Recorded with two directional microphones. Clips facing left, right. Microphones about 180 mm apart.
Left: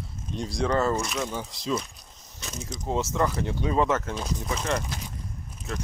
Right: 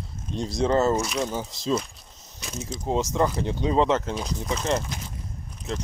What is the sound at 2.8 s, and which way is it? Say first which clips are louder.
Speech: right 2 dB; 15° right (ahead or behind).